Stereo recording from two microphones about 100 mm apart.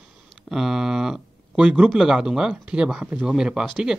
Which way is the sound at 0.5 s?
5° right (ahead or behind).